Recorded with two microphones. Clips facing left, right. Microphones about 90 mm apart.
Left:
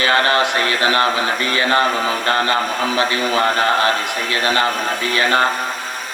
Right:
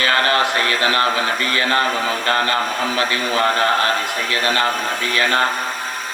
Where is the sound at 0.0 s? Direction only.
25° left (ahead or behind).